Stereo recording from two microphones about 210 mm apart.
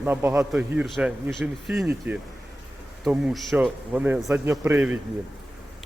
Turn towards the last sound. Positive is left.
turn(degrees=-10)  # may be behind; listen again after turning